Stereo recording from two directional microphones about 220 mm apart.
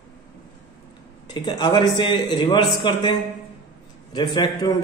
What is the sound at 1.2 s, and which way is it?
A man's voice, 20° left (ahead or behind).